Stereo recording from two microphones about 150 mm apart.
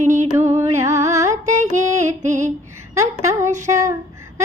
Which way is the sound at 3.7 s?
20° right (ahead or behind).